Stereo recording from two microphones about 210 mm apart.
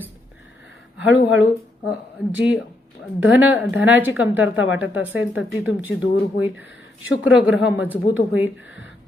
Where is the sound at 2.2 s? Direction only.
5° right (ahead or behind).